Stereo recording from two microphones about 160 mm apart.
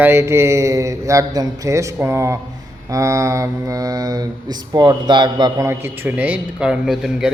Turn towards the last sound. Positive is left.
turn(degrees=-5)  # may be behind; listen again after turning